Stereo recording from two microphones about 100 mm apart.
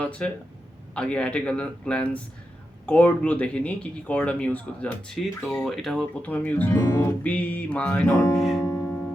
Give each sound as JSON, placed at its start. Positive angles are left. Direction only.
{"t": 0.0, "sound": "speech", "side_deg": 10}
{"t": 6.2, "sound": "speech", "side_deg": 15}
{"t": 8.0, "sound": "speech", "side_deg": 30}
{"t": 8.4, "sound": "speech", "side_deg": 0}